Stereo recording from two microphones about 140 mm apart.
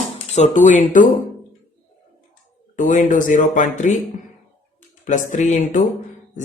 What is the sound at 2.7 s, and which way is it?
Speech, 65° left (ahead or behind).